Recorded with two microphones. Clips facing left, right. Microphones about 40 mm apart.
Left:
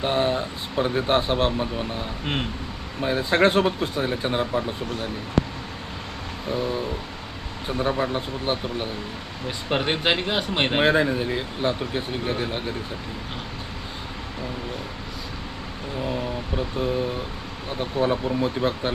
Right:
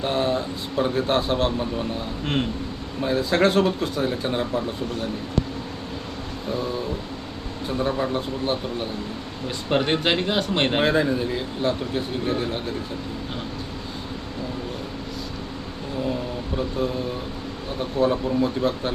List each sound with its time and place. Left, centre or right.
0.0 s speech: left
3.0 s speech: left
7.7 s speech: centre
10.8 s speech: left
17.9 s speech: left